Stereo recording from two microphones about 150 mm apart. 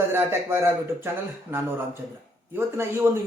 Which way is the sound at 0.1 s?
15° right (ahead or behind).